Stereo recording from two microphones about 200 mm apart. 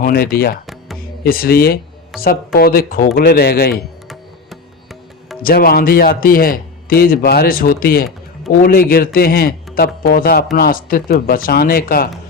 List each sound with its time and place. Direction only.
0.0 s a man's voice: 50° left (ahead or behind)
5.4 s a man's voice: 45° left (ahead or behind)